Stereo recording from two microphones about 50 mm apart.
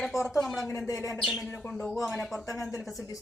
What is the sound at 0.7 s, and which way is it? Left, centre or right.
Speech, left.